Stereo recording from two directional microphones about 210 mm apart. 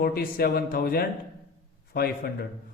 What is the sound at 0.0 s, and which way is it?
A man's voice, 45° left (ahead or behind).